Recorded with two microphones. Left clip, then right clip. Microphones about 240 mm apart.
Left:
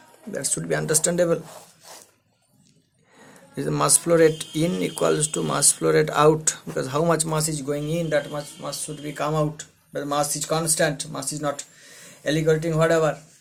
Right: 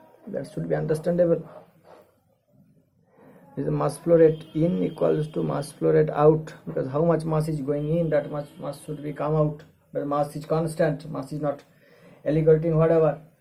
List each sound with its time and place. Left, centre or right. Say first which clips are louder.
0.3 s speech: left 2 dB; left
3.5 s speech: left 4 dB; left